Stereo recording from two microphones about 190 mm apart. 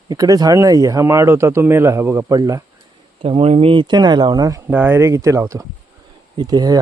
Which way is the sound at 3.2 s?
30° right (ahead or behind).